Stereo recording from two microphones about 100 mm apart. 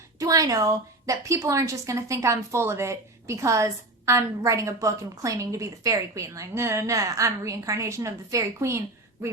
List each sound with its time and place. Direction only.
0.2 s a woman's voice: 35° right (ahead or behind)